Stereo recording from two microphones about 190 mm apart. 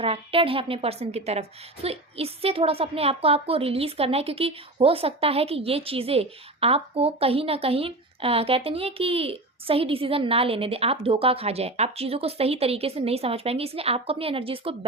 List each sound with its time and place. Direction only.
0.0 s a woman's voice: 30° right (ahead or behind)